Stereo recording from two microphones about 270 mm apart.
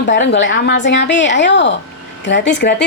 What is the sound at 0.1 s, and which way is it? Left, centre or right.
Speech, left.